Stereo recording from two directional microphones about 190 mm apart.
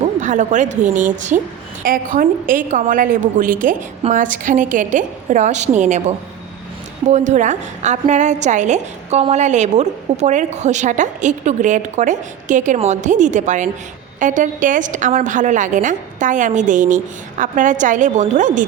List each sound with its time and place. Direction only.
0.2 s a woman's voice: 40° right (ahead or behind)
7.1 s a woman's voice: 40° right (ahead or behind)